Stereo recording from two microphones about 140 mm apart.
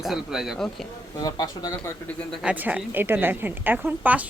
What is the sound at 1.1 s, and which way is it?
Speech, 25° left (ahead or behind).